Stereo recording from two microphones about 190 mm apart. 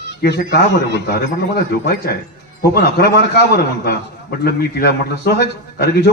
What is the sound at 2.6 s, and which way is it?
A man's voice, 55° left (ahead or behind).